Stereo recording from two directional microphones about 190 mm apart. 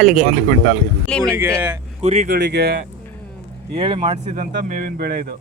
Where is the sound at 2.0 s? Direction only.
30° right (ahead or behind).